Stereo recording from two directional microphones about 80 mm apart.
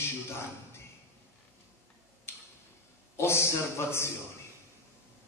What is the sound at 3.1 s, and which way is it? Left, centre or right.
Speech, left.